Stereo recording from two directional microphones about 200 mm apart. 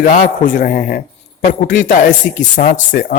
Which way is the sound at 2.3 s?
50° left (ahead or behind).